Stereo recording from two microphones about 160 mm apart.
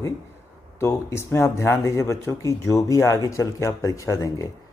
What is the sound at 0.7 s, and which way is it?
Speech, 15° left (ahead or behind).